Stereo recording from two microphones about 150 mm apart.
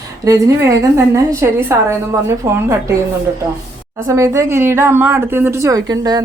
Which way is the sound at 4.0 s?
20° right (ahead or behind).